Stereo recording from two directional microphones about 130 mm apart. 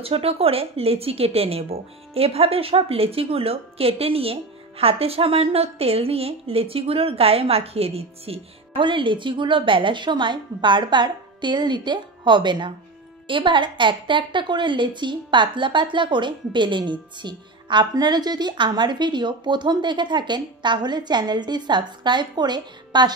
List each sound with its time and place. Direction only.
0.0 s a woman's voice: 50° right (ahead or behind); by 23.1 s 35° right (ahead or behind)